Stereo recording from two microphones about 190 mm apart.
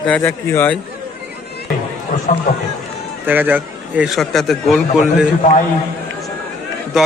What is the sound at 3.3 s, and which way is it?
A man's voice, 10° right (ahead or behind).